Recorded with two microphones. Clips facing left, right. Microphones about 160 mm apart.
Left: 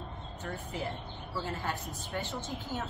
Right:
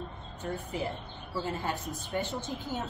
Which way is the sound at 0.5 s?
20° right (ahead or behind).